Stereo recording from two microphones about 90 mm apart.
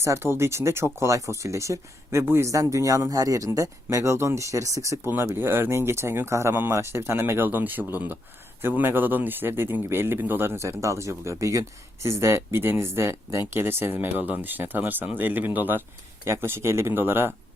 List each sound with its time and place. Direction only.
0.0 s speech: 30° right (ahead or behind)